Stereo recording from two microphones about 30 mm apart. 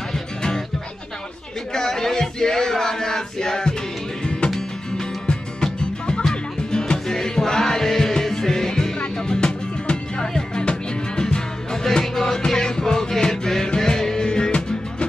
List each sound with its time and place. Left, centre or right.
0.1 s music: centre
1.7 s male singing: left
5.6 s music: left
9.4 s music: left
11.8 s music: centre